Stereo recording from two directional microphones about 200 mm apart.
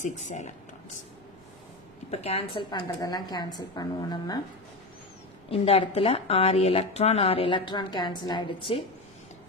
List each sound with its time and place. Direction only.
0.0 s speech: 35° left (ahead or behind)
2.0 s speech: 30° left (ahead or behind)
5.5 s speech: 30° left (ahead or behind)